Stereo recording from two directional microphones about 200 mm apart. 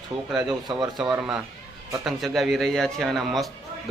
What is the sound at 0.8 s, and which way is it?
Speech, 5° right (ahead or behind).